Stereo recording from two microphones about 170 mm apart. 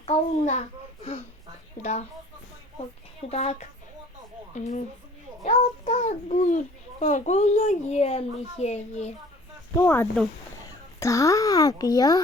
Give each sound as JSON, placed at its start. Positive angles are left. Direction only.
{"t": 0.0, "sound": "a sound", "side_deg": 40}
{"t": 1.8, "sound": "speech", "side_deg": 40}
{"t": 3.2, "sound": "speech", "side_deg": 40}
{"t": 4.5, "sound": "a child's voice", "side_deg": 45}
{"t": 9.7, "sound": "speech", "side_deg": 10}